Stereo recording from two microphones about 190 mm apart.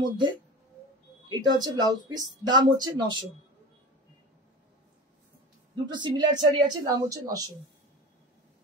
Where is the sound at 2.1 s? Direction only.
20° right (ahead or behind).